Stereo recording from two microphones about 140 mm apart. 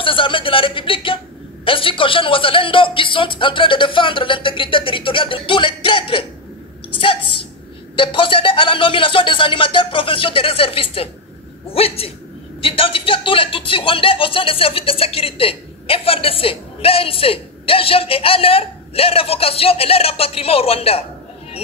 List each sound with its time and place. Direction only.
0.0 s speech: 40° left (ahead or behind)
7.9 s speech: 40° left (ahead or behind)